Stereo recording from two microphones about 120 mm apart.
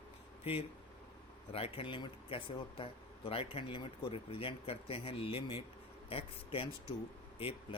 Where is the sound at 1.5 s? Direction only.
55° left (ahead or behind).